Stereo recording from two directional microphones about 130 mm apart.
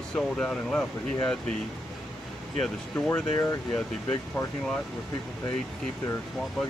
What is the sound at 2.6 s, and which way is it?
Speech, 5° left (ahead or behind).